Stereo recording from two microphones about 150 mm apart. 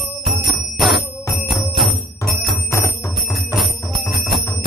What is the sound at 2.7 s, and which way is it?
Music, 20° left (ahead or behind).